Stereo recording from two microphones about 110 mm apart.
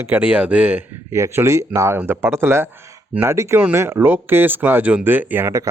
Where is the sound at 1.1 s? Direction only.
25° right (ahead or behind).